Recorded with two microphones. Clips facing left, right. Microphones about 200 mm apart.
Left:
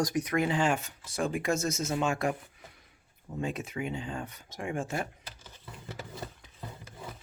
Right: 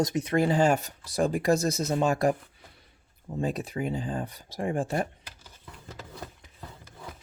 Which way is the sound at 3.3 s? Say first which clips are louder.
Right 4 dB; 35° right (ahead or behind).